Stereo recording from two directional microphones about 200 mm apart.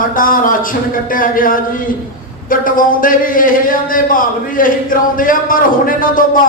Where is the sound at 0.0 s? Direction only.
45° left (ahead or behind).